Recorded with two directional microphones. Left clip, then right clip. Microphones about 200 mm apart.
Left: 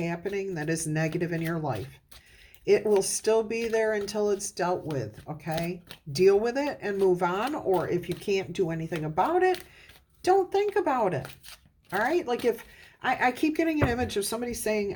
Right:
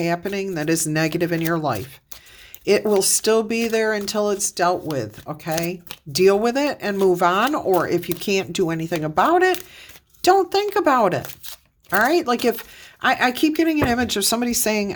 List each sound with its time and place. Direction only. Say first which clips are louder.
0.0 s speech: right 8 dB; 40° right (ahead or behind)